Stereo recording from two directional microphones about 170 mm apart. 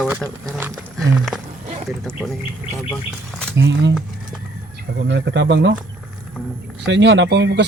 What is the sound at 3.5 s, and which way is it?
Speech, 90° right.